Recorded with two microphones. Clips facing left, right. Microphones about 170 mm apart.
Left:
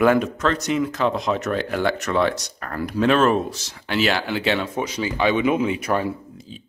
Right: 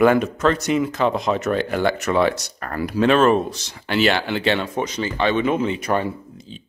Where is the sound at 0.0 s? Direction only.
Centre (ahead or behind).